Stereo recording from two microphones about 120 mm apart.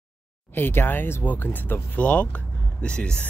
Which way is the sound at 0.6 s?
15° left (ahead or behind).